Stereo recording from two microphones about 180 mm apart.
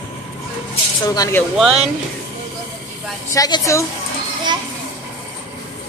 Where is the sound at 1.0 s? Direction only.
20° left (ahead or behind).